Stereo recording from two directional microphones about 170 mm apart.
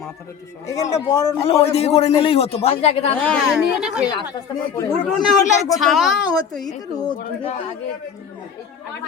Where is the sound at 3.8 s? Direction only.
5° right (ahead or behind).